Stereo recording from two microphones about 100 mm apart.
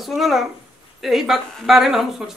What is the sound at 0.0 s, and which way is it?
A woman's voice, centre (ahead or behind).